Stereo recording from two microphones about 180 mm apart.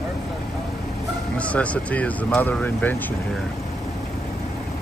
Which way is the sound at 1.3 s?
5° left (ahead or behind).